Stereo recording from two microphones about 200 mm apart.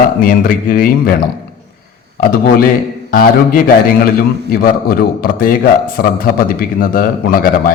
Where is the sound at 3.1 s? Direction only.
45° left (ahead or behind).